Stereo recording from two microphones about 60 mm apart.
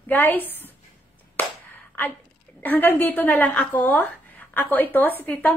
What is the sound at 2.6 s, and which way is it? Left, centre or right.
A woman's voice, left.